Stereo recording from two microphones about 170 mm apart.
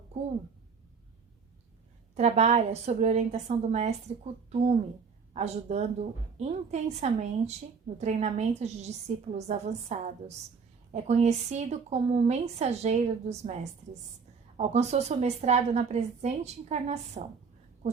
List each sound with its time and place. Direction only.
2.1 s a woman's voice: 40° right (ahead or behind)
5.3 s a woman's voice: 40° right (ahead or behind)